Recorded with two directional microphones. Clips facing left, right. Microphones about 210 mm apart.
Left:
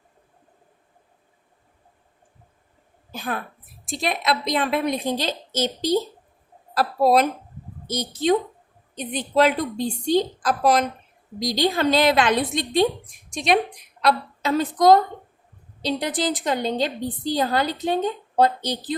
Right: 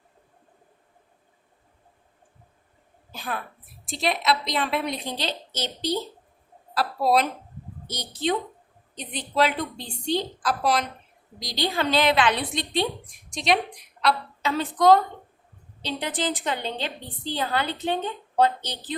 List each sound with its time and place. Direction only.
3.1 s a woman's voice: 50° left (ahead or behind)